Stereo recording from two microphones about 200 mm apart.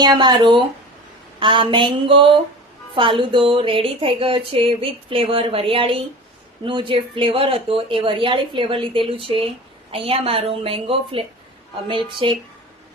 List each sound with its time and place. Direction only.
0.0 s speech: 20° right (ahead or behind)